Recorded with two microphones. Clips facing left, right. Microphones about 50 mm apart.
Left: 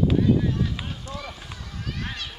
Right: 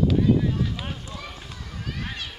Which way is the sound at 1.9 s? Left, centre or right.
Centre.